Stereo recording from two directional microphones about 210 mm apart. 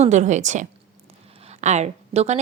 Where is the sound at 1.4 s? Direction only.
30° right (ahead or behind).